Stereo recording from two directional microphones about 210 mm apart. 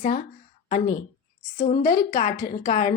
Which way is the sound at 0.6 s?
45° left (ahead or behind).